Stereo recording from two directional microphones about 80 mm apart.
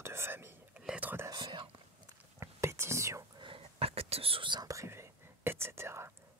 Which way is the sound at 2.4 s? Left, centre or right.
Right.